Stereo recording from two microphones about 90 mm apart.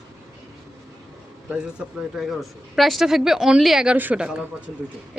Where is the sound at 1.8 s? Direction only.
10° right (ahead or behind).